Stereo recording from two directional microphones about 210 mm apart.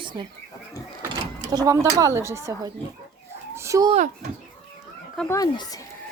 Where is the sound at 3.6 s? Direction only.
15° right (ahead or behind).